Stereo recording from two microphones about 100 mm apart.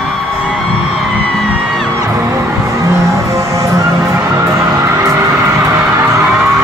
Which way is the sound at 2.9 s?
30° right (ahead or behind).